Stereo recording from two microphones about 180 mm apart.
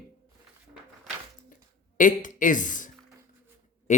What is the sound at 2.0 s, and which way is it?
Speech, 45° left (ahead or behind).